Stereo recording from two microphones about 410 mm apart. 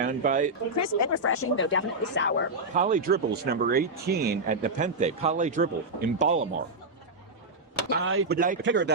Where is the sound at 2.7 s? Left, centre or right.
Centre.